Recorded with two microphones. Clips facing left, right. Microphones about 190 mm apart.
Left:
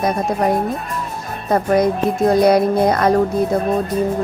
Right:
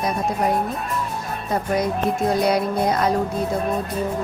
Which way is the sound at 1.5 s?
50° left (ahead or behind).